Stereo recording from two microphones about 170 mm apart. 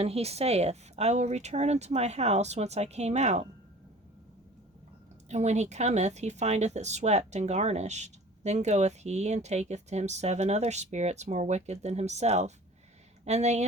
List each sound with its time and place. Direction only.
0.0 s speech: 35° right (ahead or behind)
5.3 s speech: 40° right (ahead or behind)